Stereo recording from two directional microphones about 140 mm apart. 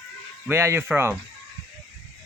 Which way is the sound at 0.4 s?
15° right (ahead or behind).